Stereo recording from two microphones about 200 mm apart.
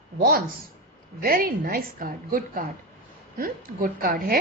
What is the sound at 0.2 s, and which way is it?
A woman's voice, 50° right (ahead or behind).